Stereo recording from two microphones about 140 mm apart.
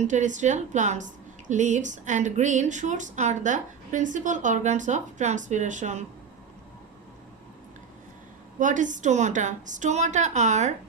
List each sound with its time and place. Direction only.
0.0 s speech: 60° right (ahead or behind)
8.5 s speech: 65° right (ahead or behind)